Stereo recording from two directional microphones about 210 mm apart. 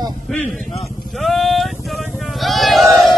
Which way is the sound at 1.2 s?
Centre (ahead or behind).